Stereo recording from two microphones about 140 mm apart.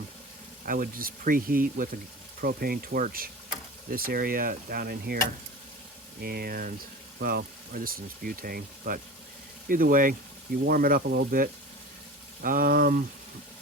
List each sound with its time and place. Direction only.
0.6 s speech: 85° right
6.1 s speech: 90° right